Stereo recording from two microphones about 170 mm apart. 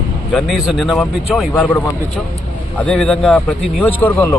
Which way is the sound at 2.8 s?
5° left (ahead or behind).